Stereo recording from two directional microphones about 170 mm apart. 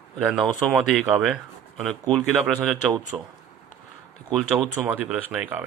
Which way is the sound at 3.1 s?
20° right (ahead or behind).